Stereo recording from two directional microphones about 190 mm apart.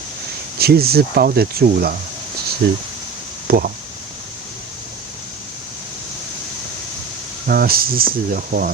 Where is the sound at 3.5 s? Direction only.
50° right (ahead or behind).